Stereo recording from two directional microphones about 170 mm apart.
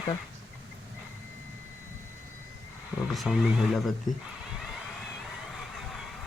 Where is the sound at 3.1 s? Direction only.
Centre (ahead or behind).